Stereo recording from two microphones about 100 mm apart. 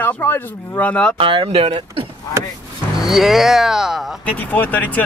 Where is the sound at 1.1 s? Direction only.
60° right (ahead or behind).